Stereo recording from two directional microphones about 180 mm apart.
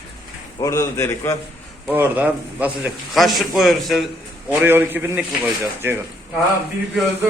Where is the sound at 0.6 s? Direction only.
15° left (ahead or behind).